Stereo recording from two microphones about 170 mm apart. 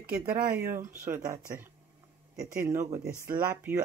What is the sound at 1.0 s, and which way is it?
Speech, 15° right (ahead or behind).